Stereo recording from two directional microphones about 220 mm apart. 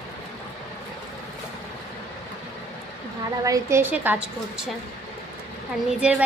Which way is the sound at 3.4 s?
15° right (ahead or behind).